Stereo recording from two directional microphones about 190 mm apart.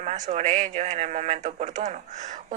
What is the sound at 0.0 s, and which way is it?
Speech, 35° right (ahead or behind).